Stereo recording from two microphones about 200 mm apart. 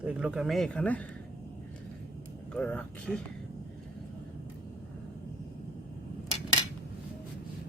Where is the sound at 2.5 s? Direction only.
5° left (ahead or behind).